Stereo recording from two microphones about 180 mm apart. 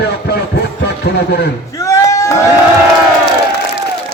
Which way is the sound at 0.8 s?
65° left (ahead or behind).